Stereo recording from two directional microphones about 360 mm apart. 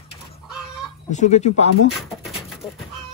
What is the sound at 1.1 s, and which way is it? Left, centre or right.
Speech, centre.